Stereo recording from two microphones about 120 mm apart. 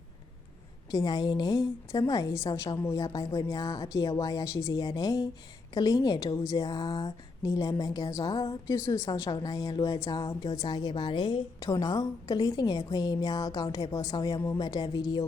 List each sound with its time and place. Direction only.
0.9 s a woman's voice: 30° left (ahead or behind)